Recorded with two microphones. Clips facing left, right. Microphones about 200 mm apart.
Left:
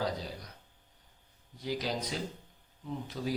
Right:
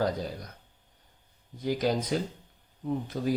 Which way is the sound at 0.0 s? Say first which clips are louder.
Right 6 dB; 50° right (ahead or behind).